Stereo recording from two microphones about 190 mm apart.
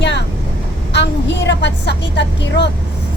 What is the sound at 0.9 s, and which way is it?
Vehicle, 70° left (ahead or behind).